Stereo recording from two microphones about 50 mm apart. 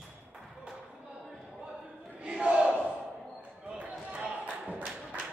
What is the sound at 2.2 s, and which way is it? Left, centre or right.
Battle cry, right.